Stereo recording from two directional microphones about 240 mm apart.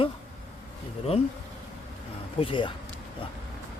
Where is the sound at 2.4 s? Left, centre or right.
Left.